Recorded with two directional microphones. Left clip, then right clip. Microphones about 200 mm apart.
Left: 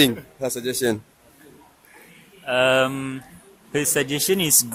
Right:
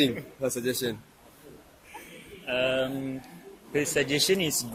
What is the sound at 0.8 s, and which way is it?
Speech, 35° left (ahead or behind).